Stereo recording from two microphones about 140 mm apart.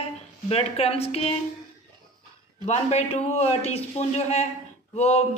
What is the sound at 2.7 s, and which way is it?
Speech, 50° left (ahead or behind).